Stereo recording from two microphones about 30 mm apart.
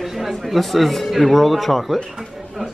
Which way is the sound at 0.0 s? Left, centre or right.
Centre.